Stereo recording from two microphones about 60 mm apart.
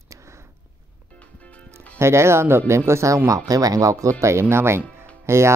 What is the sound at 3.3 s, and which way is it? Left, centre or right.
Speech, right.